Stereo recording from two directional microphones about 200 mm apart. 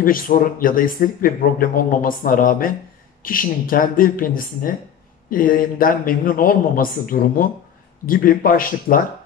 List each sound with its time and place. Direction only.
0.0 s a man's voice: 45° left (ahead or behind)